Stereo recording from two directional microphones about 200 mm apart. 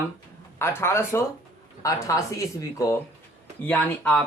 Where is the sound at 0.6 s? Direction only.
10° left (ahead or behind).